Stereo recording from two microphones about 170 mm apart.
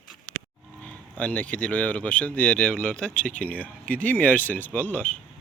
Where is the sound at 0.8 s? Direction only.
10° left (ahead or behind).